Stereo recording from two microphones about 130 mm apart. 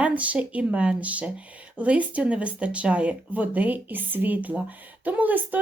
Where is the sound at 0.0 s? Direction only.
10° right (ahead or behind).